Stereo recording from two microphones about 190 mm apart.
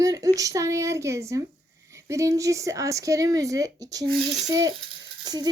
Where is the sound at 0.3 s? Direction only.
15° right (ahead or behind).